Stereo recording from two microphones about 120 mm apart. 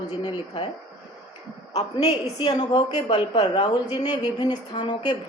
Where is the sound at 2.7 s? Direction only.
50° left (ahead or behind).